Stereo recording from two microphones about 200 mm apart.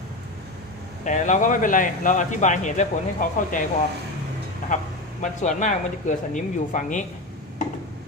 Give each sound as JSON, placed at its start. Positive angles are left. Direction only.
{"t": 1.0, "sound": "a man's voice", "side_deg": 35}
{"t": 4.7, "sound": "a man's voice", "side_deg": 40}